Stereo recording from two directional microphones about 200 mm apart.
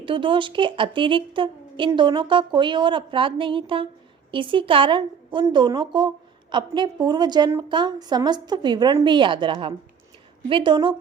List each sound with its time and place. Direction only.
0.0 s a woman's voice: 25° right (ahead or behind)